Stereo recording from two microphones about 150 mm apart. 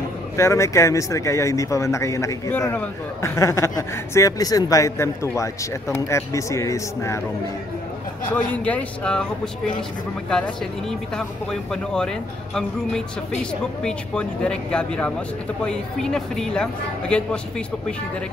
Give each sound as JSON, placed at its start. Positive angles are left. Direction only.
{"t": 0.4, "sound": "speech", "side_deg": 20}
{"t": 8.3, "sound": "speech", "side_deg": 10}